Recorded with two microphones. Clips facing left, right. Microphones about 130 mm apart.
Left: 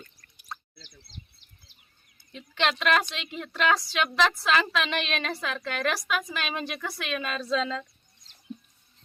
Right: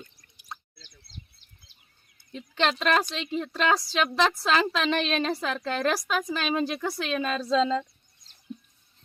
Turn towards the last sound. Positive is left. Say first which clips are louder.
# right 5 dB
turn(degrees=-25)  # may be behind; listen again after turning